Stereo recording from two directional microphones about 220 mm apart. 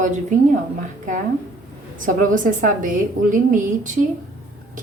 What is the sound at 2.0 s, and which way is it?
A woman's voice, 35° right (ahead or behind).